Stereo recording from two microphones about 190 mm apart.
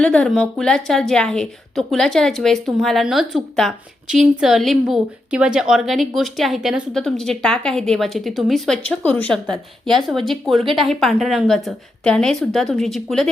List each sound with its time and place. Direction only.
0.0 s a woman's voice: 5° left (ahead or behind)